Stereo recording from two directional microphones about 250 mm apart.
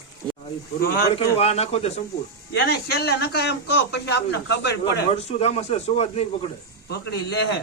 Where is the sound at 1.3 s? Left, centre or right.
Left.